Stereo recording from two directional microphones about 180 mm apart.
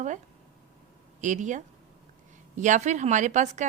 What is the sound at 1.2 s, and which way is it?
A woman's voice, 45° right (ahead or behind).